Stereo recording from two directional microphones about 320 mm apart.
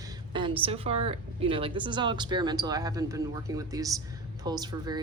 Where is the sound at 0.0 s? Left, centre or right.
Centre.